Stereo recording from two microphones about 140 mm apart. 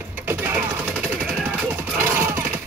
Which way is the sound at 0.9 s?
5° left (ahead or behind).